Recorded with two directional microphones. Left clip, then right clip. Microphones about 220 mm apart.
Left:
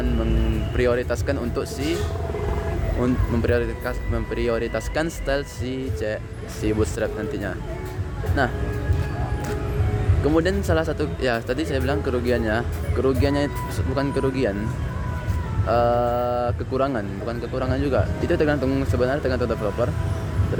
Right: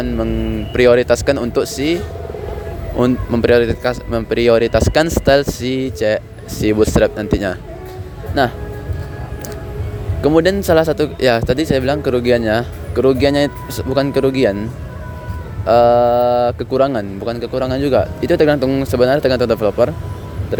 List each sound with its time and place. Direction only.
0.8 s speech: 35° right (ahead or behind)
3.0 s speech: 35° right (ahead or behind)
10.2 s speech: 35° right (ahead or behind)
15.6 s speech: 35° right (ahead or behind)